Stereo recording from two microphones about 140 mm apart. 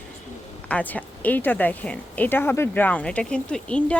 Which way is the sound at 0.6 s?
10° left (ahead or behind).